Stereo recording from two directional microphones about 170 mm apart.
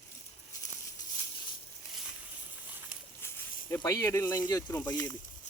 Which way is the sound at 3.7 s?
20° left (ahead or behind).